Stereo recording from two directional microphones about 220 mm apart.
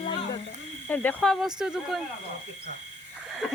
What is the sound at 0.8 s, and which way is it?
Speech, 10° left (ahead or behind).